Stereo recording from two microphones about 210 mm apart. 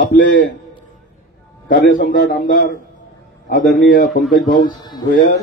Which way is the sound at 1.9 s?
45° left (ahead or behind).